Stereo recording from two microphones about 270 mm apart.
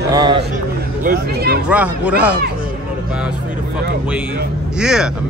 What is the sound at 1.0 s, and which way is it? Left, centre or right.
Speech, right.